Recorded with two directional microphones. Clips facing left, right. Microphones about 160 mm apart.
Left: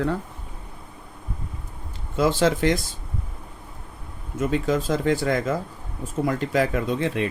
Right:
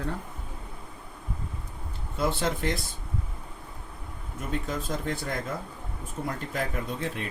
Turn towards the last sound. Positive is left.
turn(degrees=90)